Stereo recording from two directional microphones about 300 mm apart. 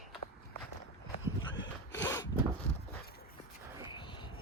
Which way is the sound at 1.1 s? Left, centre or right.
Left.